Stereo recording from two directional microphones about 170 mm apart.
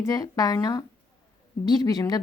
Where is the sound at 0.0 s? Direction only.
20° left (ahead or behind).